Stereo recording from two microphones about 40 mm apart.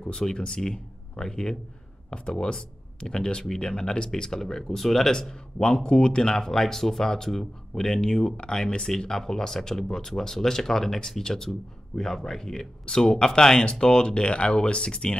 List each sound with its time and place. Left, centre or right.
0.0 s speech: centre
12.8 s speech: left